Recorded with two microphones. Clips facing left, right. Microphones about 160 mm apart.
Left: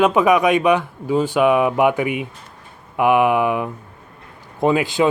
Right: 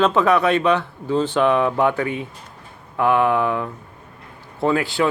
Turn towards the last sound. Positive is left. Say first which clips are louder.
# left 2 dB
turn(degrees=15)  # may be behind; listen again after turning